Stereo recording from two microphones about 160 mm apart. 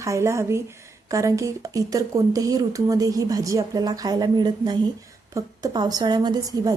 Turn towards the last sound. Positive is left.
turn(degrees=-25)  # may be behind; listen again after turning